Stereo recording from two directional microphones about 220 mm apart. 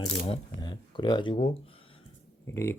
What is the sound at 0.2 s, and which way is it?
Speech, 25° left (ahead or behind).